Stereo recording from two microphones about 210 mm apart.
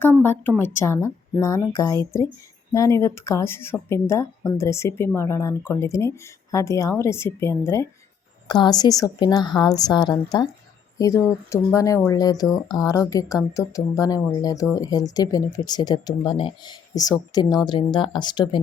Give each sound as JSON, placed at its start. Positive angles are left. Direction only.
{"t": 0.0, "sound": "a woman's voice", "side_deg": 10}